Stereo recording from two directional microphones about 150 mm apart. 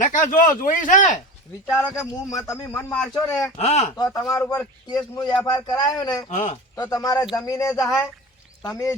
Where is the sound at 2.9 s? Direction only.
10° left (ahead or behind).